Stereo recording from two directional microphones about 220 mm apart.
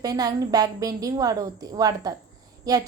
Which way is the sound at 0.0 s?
15° right (ahead or behind).